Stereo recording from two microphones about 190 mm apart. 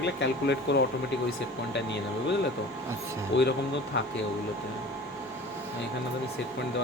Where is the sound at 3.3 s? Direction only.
70° left (ahead or behind).